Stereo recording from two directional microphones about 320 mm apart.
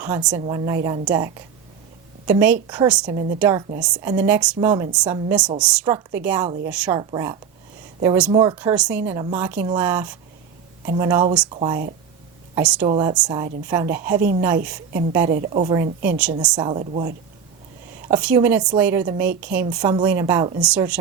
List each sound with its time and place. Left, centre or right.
0.0 s a woman's voice: centre
12.8 s speech: centre
14.2 s speech: right
14.4 s speech: centre
15.3 s speech: right
16.0 s a woman's voice: centre
18.1 s a woman's voice: centre